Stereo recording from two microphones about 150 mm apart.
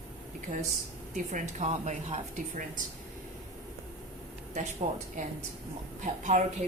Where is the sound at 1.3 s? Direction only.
50° right (ahead or behind).